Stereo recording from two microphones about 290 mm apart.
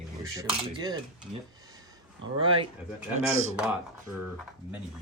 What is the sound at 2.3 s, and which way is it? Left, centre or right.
Speech, centre.